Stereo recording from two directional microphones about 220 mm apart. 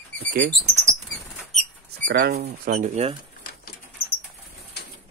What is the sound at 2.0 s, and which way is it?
Speech, 45° right (ahead or behind).